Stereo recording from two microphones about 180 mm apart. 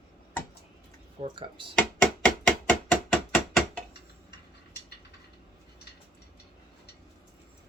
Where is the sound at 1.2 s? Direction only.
30° right (ahead or behind).